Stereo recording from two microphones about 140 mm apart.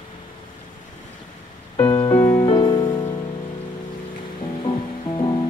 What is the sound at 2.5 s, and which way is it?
Music, 35° left (ahead or behind).